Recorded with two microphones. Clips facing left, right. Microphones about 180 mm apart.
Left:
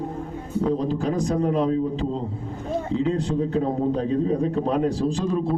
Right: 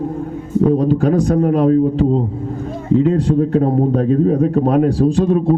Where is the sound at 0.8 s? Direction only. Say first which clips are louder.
Right 9 dB; 60° right (ahead or behind).